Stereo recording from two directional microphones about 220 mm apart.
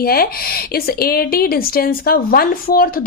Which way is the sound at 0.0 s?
45° left (ahead or behind).